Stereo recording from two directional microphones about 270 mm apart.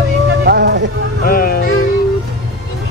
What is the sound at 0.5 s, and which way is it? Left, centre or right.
Music, right.